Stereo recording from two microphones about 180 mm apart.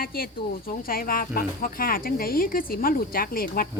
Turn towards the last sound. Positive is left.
turn(degrees=55)  # may be behind; listen again after turning